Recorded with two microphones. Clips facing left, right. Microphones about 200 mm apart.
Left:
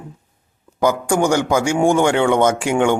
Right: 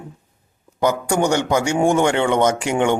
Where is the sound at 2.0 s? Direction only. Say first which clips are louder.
Left 2 dB; 10° left (ahead or behind).